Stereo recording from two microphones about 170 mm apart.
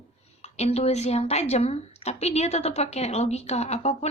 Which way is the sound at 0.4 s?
40° left (ahead or behind).